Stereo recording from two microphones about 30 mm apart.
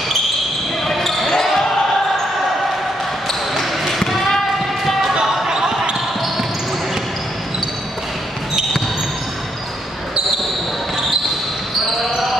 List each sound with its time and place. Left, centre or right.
0.8 s basketball bounce: centre
3.5 s basketball bounce: centre
5.5 s basketball bounce: centre